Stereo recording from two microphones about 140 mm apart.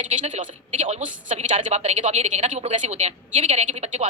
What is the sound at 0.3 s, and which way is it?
A woman's voice, 55° right (ahead or behind).